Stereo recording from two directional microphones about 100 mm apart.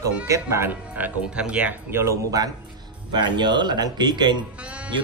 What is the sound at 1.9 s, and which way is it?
Speech, 35° right (ahead or behind).